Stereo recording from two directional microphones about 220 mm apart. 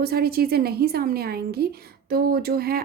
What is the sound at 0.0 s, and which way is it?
A woman's voice, 45° right (ahead or behind).